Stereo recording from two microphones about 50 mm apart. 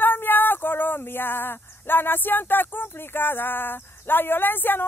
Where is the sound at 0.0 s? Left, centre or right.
Left.